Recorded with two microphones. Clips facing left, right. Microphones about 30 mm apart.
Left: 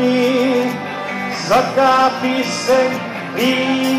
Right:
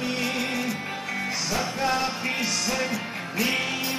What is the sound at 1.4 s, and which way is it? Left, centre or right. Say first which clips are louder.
Music: left 15 dB; left.